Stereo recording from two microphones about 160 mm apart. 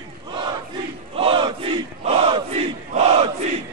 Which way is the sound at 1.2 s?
35° right (ahead or behind).